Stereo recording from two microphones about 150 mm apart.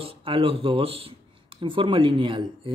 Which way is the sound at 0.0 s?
35° right (ahead or behind).